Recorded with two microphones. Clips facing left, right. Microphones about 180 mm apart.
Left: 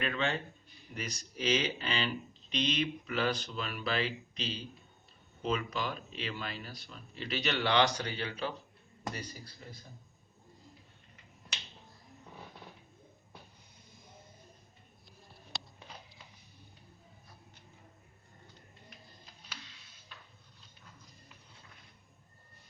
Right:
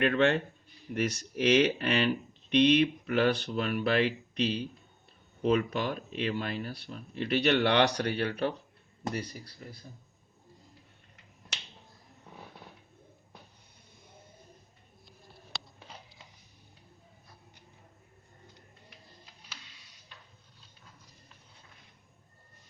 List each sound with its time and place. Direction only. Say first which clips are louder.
0.0 s speech: right 9 dB; 65° right (ahead or behind)